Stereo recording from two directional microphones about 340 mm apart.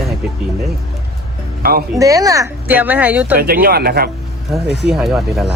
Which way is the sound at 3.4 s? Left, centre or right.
Right.